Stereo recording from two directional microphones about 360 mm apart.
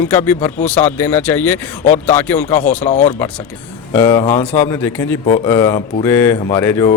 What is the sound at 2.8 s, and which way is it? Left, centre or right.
Speech, centre.